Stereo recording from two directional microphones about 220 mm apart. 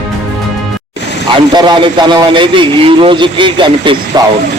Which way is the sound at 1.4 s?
20° right (ahead or behind).